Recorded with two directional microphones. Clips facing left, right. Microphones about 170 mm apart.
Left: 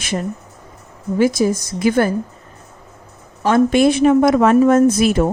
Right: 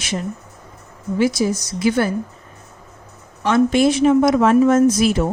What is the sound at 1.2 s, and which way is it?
Speech, 50° left (ahead or behind).